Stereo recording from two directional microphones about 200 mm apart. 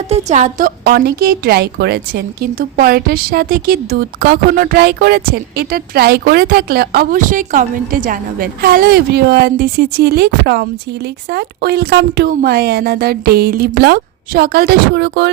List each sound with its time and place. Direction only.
0.1 s a woman's voice: 35° right (ahead or behind); by 15.3 s 55° right (ahead or behind)